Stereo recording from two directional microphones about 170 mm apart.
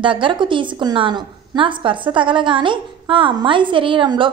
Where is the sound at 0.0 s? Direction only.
30° right (ahead or behind).